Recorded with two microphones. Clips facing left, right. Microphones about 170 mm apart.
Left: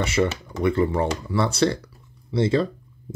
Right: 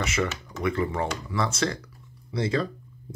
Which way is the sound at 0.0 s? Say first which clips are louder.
Left 5 dB; 30° left (ahead or behind).